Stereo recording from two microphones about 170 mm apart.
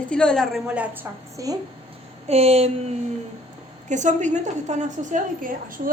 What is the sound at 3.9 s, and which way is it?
A woman's voice, 45° right (ahead or behind).